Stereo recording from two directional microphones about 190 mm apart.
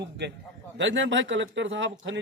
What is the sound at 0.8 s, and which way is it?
A man's voice, 75° right (ahead or behind).